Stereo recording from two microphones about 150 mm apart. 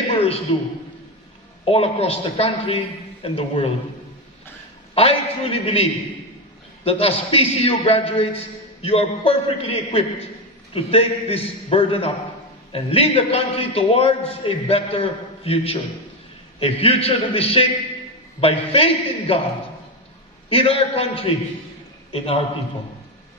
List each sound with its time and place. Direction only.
0.1 s a sound: 40° left (ahead or behind)
1.7 s a man's voice: 40° left (ahead or behind)
4.9 s a man's voice: 40° left (ahead or behind)
16.8 s a man's voice: 40° left (ahead or behind)
20.4 s a man's voice: 40° left (ahead or behind)